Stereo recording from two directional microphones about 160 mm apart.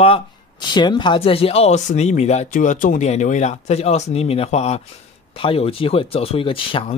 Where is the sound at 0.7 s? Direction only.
30° left (ahead or behind).